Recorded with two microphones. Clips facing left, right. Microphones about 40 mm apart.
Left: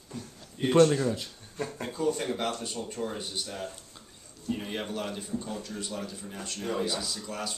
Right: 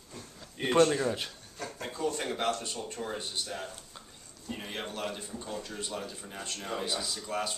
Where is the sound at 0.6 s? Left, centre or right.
Right.